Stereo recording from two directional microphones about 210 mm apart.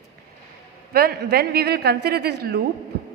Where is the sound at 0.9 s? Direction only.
45° right (ahead or behind).